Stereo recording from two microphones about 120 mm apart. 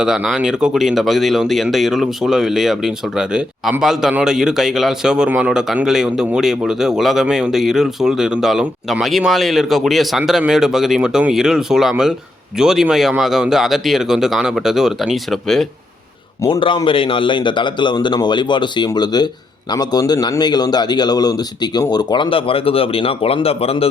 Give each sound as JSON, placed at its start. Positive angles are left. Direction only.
{"t": 0.0, "sound": "speech", "side_deg": -5}
{"t": 16.5, "sound": "speech", "side_deg": 45}